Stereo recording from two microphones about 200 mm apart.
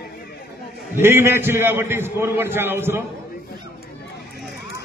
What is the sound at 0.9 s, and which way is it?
A man's voice, 10° right (ahead or behind).